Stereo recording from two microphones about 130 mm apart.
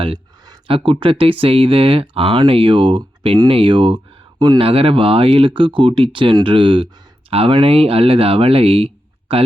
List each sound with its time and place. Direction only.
0.7 s speech: 40° right (ahead or behind)